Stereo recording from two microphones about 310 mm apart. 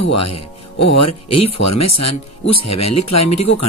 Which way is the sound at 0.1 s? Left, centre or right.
Left.